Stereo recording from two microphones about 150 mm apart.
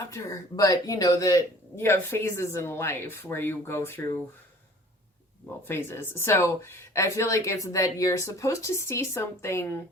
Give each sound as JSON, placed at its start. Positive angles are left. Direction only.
{"t": 0.0, "sound": "speech", "side_deg": 20}
{"t": 5.6, "sound": "speech", "side_deg": 15}